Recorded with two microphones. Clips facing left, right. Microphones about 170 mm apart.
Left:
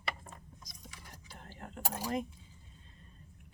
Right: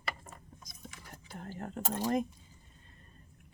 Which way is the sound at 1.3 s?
45° right (ahead or behind).